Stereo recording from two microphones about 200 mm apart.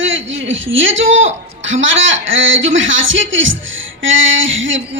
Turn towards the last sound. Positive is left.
turn(degrees=-70)  # may be behind; listen again after turning